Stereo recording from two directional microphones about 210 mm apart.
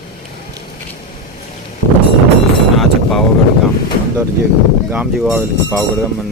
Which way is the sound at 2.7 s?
Centre (ahead or behind).